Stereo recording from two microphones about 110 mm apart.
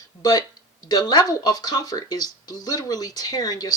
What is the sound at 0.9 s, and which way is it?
Speech, 35° left (ahead or behind).